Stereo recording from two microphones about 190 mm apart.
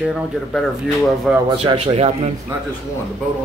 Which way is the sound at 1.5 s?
30° right (ahead or behind).